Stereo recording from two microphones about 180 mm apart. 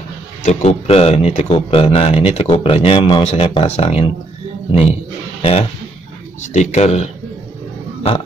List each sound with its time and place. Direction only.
0.4 s speech: 40° left (ahead or behind)
5.4 s speech: 30° left (ahead or behind)